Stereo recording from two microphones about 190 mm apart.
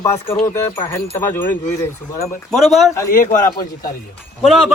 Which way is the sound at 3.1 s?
45° left (ahead or behind).